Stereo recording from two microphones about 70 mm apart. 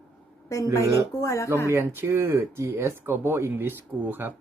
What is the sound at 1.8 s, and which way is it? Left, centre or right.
Speech, right.